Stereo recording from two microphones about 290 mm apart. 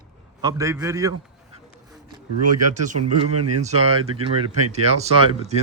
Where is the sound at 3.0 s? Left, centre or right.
Right.